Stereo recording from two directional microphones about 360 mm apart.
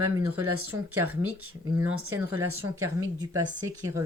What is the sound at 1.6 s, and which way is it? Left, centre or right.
Speech, centre.